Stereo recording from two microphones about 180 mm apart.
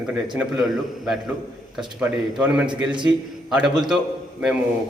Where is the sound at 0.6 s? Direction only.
Centre (ahead or behind).